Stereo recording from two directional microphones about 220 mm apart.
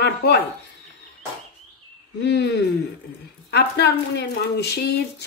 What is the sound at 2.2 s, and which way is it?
Speech, 50° left (ahead or behind).